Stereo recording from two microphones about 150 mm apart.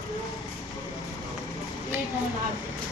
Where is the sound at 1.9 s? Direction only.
15° right (ahead or behind).